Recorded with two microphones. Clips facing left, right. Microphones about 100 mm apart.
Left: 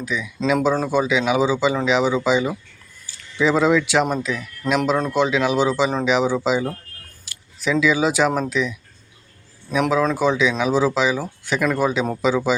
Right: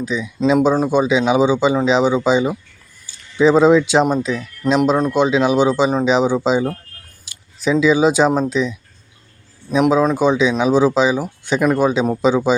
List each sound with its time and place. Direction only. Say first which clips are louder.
0.0 s a man's voice: right 5 dB; 25° right (ahead or behind)
9.9 s a man's voice: right 2 dB; 20° right (ahead or behind)